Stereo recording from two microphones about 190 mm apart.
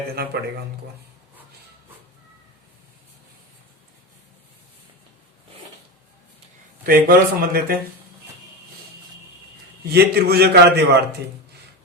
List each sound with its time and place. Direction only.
0.2 s a man's voice: 55° right (ahead or behind)
6.8 s speech: 50° right (ahead or behind)
9.9 s a man's voice: 55° right (ahead or behind)